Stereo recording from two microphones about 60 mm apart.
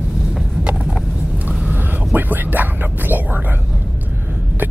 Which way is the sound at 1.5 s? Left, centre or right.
Right.